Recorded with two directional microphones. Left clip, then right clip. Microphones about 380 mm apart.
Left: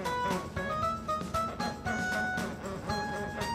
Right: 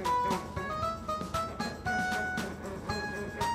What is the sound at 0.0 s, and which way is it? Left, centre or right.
Music, centre.